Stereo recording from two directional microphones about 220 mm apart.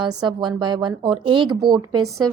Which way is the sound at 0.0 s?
20° right (ahead or behind).